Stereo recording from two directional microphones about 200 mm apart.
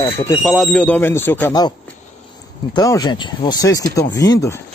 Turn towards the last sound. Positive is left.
turn(degrees=15)  # may be behind; listen again after turning